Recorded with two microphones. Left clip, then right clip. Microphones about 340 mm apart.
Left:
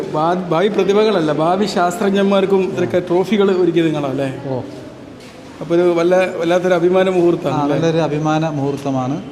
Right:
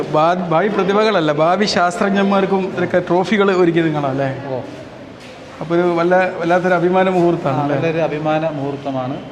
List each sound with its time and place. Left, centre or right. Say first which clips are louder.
0.1 s speech: right 3 dB; centre
0.5 s a man's voice: left 1 dB; centre
1.0 s speech: even; centre
1.4 s speech: right 1 dB; centre
2.1 s a man's voice: left 2 dB; centre
3.1 s speech: left 1 dB; centre
3.8 s a man's voice: even; centre
5.7 s a man's voice: left 1 dB; centre
7.8 s a man's voice: left 1 dB; left